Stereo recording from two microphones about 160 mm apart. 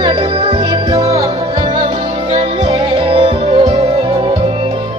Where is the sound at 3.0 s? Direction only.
35° right (ahead or behind).